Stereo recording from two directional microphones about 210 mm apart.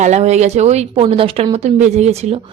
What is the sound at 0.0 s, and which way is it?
Speech, 35° right (ahead or behind).